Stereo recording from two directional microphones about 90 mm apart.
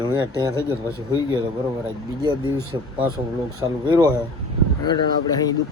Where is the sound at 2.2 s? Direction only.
55° right (ahead or behind).